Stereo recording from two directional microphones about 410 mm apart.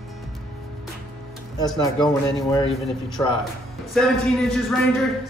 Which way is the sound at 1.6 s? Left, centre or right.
Centre.